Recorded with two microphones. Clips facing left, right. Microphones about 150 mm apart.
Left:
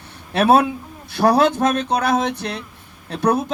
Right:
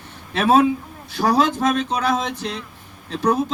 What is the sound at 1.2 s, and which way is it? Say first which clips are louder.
A man's voice: left 3 dB; 65° left (ahead or behind).